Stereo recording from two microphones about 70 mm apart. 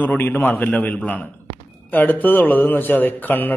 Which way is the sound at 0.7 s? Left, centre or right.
Left.